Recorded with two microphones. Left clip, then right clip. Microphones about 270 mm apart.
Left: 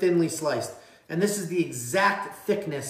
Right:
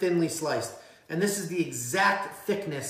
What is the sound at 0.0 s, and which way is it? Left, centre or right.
A woman's voice, centre.